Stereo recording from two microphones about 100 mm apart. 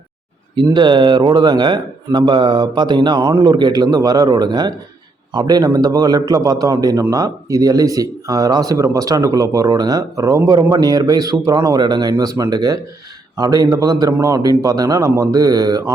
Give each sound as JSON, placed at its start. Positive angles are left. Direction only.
{"t": 0.5, "sound": "a man's voice", "side_deg": -50}